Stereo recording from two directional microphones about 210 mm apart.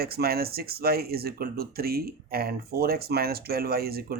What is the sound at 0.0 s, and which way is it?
Speech, 50° right (ahead or behind).